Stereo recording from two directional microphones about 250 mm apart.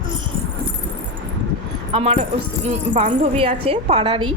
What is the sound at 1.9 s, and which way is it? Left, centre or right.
A woman's voice, right.